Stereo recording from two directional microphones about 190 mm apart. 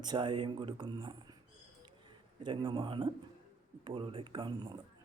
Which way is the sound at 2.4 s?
25° right (ahead or behind).